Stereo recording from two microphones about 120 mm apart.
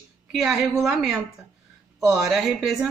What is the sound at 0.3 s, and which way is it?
Speech, 5° right (ahead or behind).